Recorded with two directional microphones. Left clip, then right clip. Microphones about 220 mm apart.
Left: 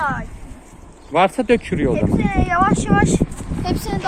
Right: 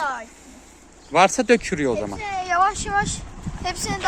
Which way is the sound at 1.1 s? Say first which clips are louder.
Left 1 dB; 10° right (ahead or behind).